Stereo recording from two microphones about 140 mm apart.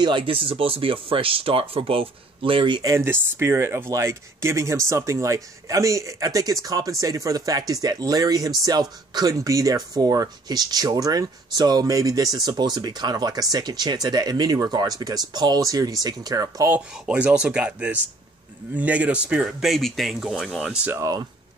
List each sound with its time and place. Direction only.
0.0 s speech: 35° right (ahead or behind)
16.7 s speech: 5° right (ahead or behind)
21.0 s speech: 25° right (ahead or behind)